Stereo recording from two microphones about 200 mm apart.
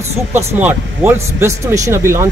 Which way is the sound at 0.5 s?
10° right (ahead or behind).